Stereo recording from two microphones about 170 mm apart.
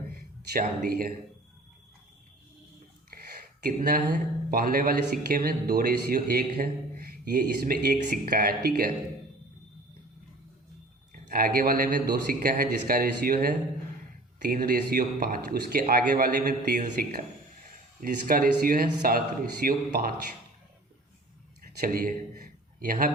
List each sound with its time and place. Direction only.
0.1 s a sound: 60° right (ahead or behind)
0.9 s speech: 60° right (ahead or behind)
3.1 s speech: 60° right (ahead or behind)
11.1 s a man's voice: 55° right (ahead or behind)
18.0 s speech: 55° right (ahead or behind)
21.6 s a sound: 55° right (ahead or behind)